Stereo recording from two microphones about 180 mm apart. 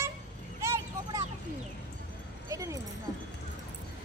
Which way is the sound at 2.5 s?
15° right (ahead or behind).